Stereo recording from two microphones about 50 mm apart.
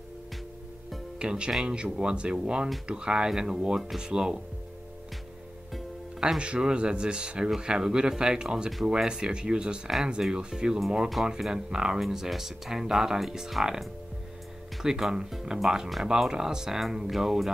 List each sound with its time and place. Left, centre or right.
1.2 s speech: centre
6.1 s speech: centre